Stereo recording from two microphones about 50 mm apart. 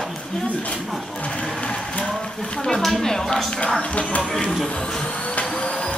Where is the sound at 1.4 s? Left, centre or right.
Left.